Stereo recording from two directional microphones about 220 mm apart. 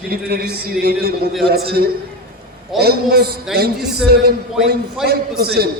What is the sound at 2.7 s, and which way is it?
Speech, 45° right (ahead or behind).